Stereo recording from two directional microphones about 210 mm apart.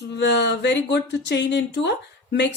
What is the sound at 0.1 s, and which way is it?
Speech, 55° left (ahead or behind).